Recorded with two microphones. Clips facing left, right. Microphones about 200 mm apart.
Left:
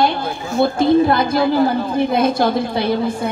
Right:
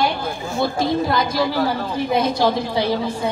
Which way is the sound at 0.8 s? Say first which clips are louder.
Left 7 dB; 60° left (ahead or behind).